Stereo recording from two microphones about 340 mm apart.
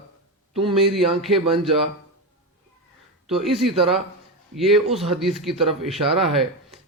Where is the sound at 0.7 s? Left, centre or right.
Centre.